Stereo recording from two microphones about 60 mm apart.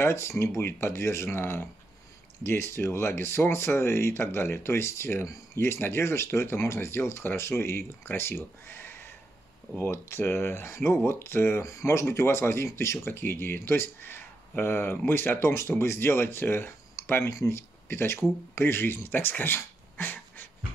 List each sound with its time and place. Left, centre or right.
0.0 s speech: left
11.6 s speech: left